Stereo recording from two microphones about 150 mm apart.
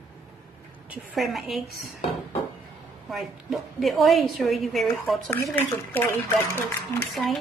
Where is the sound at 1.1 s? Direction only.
Centre (ahead or behind).